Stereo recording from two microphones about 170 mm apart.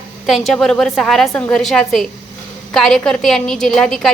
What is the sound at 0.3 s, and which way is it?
A woman's voice, centre (ahead or behind).